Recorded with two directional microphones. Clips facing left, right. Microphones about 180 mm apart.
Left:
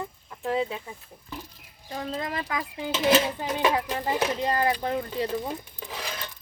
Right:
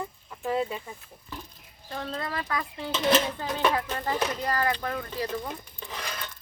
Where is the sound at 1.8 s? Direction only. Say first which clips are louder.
Left 2 dB; 10° left (ahead or behind).